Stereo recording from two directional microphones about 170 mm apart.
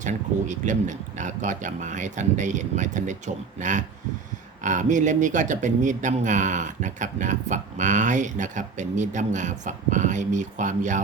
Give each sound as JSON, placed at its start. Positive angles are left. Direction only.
{"t": 0.0, "sound": "speech", "side_deg": -45}